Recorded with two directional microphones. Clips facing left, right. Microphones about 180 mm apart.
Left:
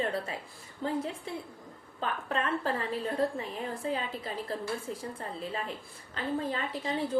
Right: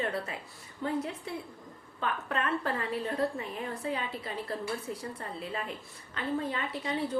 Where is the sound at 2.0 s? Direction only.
30° left (ahead or behind).